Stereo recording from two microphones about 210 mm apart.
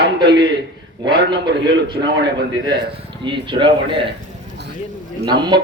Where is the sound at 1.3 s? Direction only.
50° right (ahead or behind).